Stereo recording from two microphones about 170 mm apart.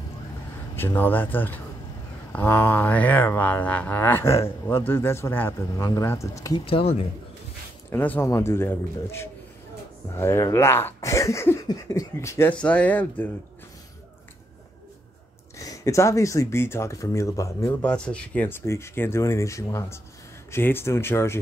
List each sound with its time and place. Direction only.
0.7 s speech: 10° left (ahead or behind)
6.6 s speech: 35° left (ahead or behind)
7.9 s speech: 10° left (ahead or behind)
15.5 s speech: 20° left (ahead or behind)
17.8 s speech: 5° left (ahead or behind)